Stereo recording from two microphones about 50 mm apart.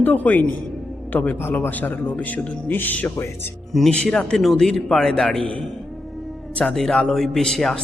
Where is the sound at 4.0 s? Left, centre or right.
Centre.